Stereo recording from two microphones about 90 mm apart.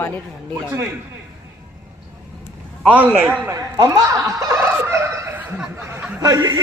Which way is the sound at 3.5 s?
40° right (ahead or behind).